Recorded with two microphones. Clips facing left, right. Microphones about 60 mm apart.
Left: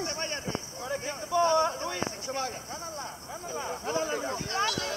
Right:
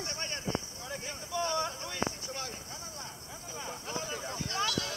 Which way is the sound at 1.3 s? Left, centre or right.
Left.